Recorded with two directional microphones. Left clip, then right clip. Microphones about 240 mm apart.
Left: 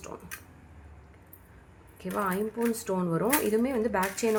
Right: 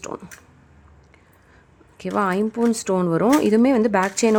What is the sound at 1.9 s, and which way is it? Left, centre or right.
Speech, right.